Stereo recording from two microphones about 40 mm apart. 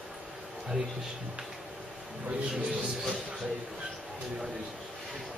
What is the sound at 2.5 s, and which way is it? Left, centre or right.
Speech, centre.